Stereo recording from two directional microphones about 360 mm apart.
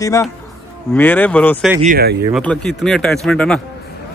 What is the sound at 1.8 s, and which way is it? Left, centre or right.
Speech, right.